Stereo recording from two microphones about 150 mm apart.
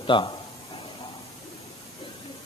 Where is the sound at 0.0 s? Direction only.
35° left (ahead or behind).